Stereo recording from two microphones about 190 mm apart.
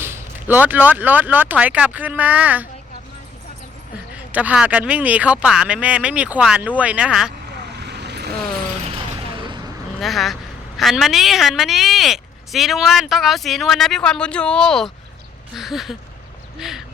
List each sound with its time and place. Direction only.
0.0 s speech: 10° right (ahead or behind)
4.3 s speech: 10° right (ahead or behind)
7.5 s vehicle: 60° right (ahead or behind)
8.8 s a sound: 25° right (ahead or behind)
10.0 s speech: centre (ahead or behind)